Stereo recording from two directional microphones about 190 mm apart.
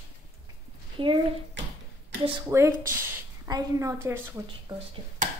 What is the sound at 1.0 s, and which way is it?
Speech, 25° right (ahead or behind).